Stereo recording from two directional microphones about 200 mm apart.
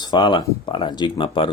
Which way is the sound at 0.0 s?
25° left (ahead or behind).